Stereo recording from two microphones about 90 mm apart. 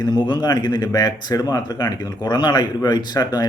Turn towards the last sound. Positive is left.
turn(degrees=50)  # may be behind; listen again after turning